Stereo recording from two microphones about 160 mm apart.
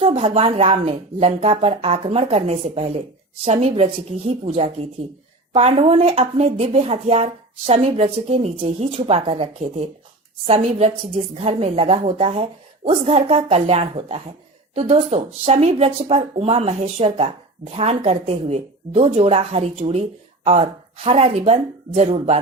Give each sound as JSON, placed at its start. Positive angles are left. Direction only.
{"t": 0.0, "sound": "a woman's voice", "side_deg": -40}